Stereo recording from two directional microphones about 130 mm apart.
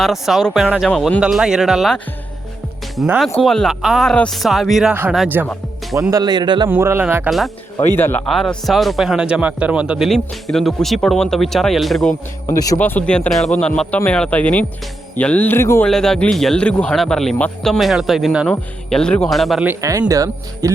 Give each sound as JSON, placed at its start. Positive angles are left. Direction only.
{"t": 0.0, "sound": "speech", "side_deg": 0}
{"t": 3.4, "sound": "speech", "side_deg": 0}
{"t": 5.4, "sound": "speech", "side_deg": -15}
{"t": 6.0, "sound": "speech", "side_deg": -25}
{"t": 6.7, "sound": "speech", "side_deg": -15}
{"t": 7.3, "sound": "speech", "side_deg": 0}
{"t": 7.9, "sound": "speech", "side_deg": 15}
{"t": 8.3, "sound": "speech", "side_deg": 0}
{"t": 10.1, "sound": "speech", "side_deg": 0}
{"t": 12.5, "sound": "speech", "side_deg": 25}
{"t": 12.8, "sound": "speech", "side_deg": 10}
{"t": 15.9, "sound": "speech", "side_deg": 5}
{"t": 19.8, "sound": "speech", "side_deg": -25}